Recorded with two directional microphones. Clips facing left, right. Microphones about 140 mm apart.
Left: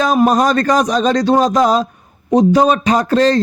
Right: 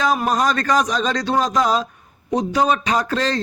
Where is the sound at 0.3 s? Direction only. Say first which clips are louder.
Left 6 dB; 40° left (ahead or behind).